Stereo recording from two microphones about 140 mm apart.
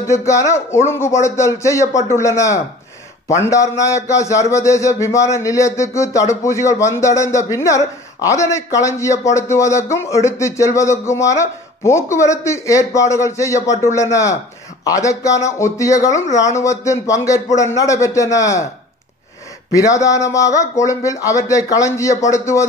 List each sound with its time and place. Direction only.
0.0 s a man's voice: 20° left (ahead or behind)
14.9 s a man's voice: 25° left (ahead or behind)
19.7 s a man's voice: 25° left (ahead or behind)